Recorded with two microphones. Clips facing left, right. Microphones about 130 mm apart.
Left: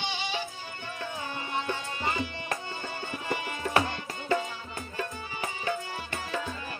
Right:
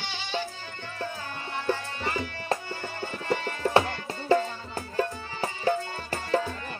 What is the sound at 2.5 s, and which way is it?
Music, 30° right (ahead or behind).